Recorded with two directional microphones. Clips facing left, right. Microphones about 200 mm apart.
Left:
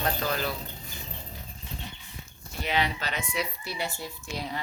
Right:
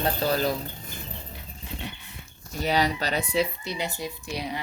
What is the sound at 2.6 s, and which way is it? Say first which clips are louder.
Speech: right 4 dB; 40° right (ahead or behind).